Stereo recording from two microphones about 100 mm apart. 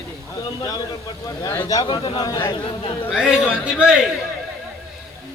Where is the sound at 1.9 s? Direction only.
55° left (ahead or behind).